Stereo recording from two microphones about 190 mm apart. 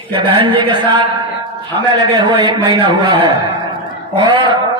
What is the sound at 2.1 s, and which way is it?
A man's voice, 25° right (ahead or behind).